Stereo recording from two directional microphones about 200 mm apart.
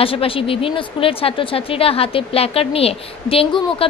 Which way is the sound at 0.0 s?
25° left (ahead or behind).